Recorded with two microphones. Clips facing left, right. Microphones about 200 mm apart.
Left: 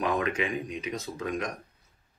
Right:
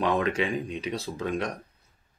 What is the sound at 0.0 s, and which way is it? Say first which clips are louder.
Speech: right 3 dB; 30° right (ahead or behind).